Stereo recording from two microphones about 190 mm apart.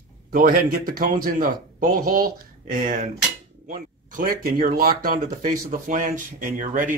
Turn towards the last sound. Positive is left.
turn(degrees=-45)  # may be behind; listen again after turning